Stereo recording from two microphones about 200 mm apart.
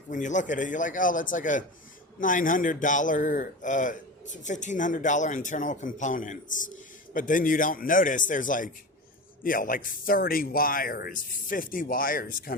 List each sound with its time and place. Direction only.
0.1 s a man's voice: 40° left (ahead or behind)